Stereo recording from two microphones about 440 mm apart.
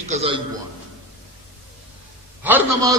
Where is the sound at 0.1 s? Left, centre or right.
Centre.